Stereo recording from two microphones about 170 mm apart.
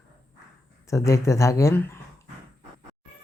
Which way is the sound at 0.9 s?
20° left (ahead or behind).